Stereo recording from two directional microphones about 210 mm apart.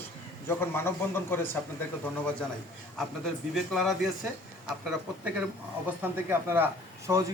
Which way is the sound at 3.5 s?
Centre (ahead or behind).